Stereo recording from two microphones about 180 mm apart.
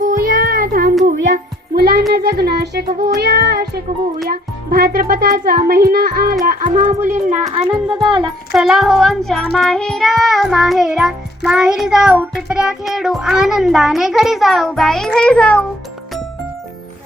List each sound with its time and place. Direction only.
0.0 s child singing: 50° right (ahead or behind)
1.0 s music: 55° right (ahead or behind)
2.1 s a child's voice: 60° right (ahead or behind)
6.4 s music: 50° right (ahead or behind)
7.5 s speech: 30° right (ahead or behind)
8.5 s music: centre (ahead or behind)